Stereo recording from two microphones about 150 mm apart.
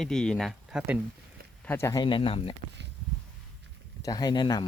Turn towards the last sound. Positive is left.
turn(degrees=30)  # may be behind; listen again after turning